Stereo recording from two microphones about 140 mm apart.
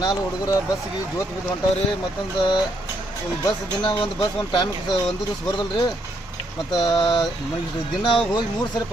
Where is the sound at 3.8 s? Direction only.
35° left (ahead or behind).